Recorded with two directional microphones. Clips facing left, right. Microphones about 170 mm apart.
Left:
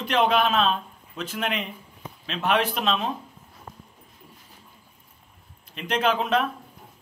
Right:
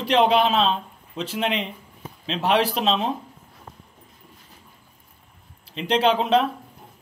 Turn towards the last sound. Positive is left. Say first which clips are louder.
# right 4 dB
turn(degrees=-30)  # may be behind; listen again after turning